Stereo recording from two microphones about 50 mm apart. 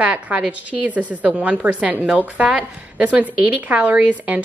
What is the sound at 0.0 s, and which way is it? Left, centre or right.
A woman's voice, right.